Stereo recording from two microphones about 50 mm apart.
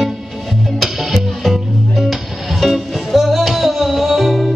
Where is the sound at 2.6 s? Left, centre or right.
Centre.